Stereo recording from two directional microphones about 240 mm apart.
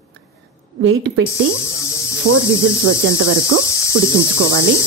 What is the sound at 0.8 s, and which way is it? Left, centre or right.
Speech, right.